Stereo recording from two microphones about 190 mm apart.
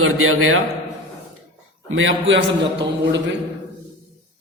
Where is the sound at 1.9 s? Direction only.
90° right.